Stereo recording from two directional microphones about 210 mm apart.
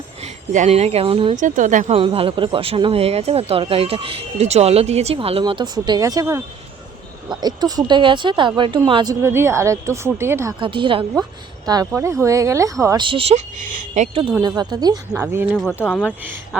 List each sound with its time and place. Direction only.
0.5 s speech: 35° right (ahead or behind)
1.4 s speech: 35° right (ahead or behind)
2.0 s speech: 25° right (ahead or behind)
7.4 s speech: 20° right (ahead or behind)
10.6 s speech: 25° right (ahead or behind)
13.7 s speech: 40° right (ahead or behind)
14.4 s speech: 20° right (ahead or behind)
15.5 s speech: 5° left (ahead or behind)
16.0 s speech: 5° right (ahead or behind)